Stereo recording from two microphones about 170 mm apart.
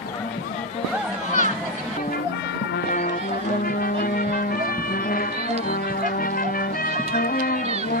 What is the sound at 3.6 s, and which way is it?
Music, 60° left (ahead or behind).